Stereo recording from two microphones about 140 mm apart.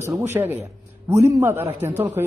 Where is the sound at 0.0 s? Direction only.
20° right (ahead or behind).